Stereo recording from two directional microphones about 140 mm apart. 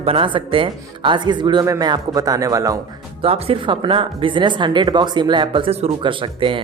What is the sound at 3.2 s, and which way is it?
Speech, 40° right (ahead or behind).